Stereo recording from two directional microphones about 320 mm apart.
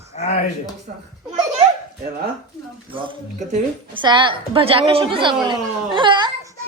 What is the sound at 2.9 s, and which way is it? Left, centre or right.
A woman's voice, centre.